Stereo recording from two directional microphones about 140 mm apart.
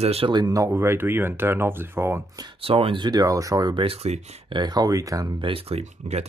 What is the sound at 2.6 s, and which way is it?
Speech, 40° right (ahead or behind).